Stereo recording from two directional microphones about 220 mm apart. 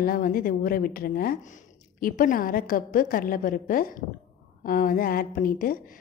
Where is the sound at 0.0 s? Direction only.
40° left (ahead or behind).